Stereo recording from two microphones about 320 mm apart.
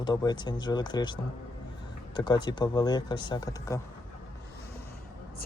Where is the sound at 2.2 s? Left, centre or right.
Centre.